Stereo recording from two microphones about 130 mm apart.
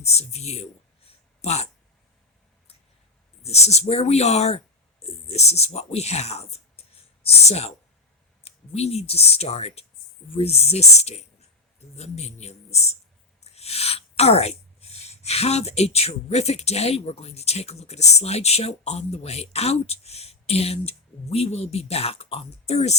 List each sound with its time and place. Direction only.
0.0 s speech: 55° left (ahead or behind)
3.4 s speech: 55° left (ahead or behind)